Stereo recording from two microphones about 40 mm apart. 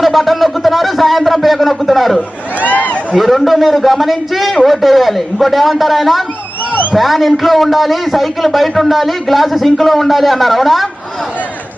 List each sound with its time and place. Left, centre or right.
0.0 s a man's voice: centre
2.6 s a sound: left
3.2 s a man's voice: centre